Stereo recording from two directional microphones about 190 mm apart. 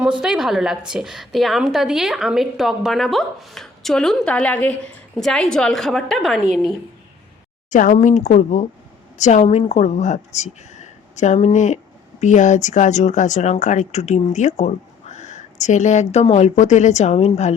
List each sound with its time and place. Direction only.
0.2 s a woman's voice: 5° right (ahead or behind)
7.7 s speech: 40° left (ahead or behind)